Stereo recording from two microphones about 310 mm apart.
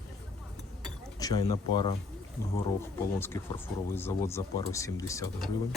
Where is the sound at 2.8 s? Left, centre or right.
Centre.